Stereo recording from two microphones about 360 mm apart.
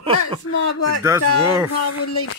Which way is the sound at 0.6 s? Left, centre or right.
Left.